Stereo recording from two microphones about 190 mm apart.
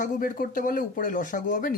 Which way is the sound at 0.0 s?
45° left (ahead or behind).